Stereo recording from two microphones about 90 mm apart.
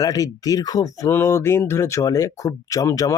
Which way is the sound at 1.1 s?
30° left (ahead or behind).